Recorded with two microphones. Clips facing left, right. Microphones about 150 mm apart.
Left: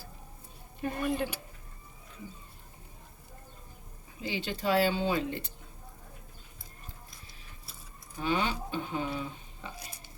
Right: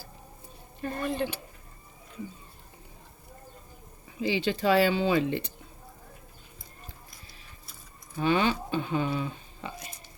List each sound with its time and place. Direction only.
0.8 s speech: 10° left (ahead or behind)
4.2 s speech: 90° right
8.2 s speech: 75° right (ahead or behind)